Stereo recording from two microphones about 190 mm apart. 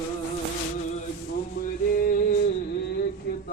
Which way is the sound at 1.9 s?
45° left (ahead or behind).